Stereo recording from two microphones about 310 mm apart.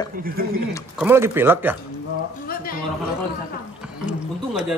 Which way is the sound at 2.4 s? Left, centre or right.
Left.